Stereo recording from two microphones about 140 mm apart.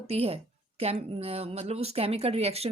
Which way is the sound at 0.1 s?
45° right (ahead or behind).